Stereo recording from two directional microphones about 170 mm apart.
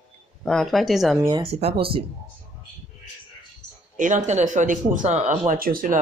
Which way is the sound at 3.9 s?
50° right (ahead or behind).